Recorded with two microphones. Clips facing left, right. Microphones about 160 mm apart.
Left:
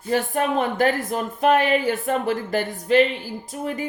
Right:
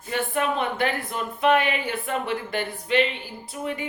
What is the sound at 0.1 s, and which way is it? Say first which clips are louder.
Speech: left 4 dB; 40° left (ahead or behind).